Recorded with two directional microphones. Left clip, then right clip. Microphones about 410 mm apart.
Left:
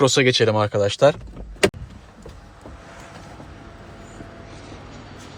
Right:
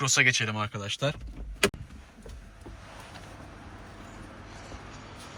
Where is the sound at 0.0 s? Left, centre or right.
Centre.